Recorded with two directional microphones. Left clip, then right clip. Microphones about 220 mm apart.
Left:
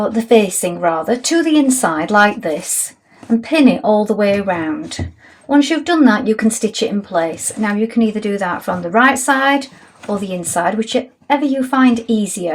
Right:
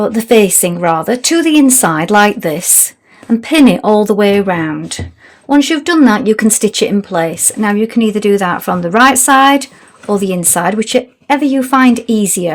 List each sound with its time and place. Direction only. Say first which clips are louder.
0.0 s speech: right 3 dB; 55° right (ahead or behind)